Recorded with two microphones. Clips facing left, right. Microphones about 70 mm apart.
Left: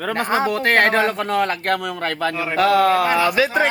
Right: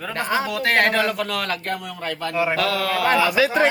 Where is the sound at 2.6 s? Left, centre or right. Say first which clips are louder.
Left 7 dB; left.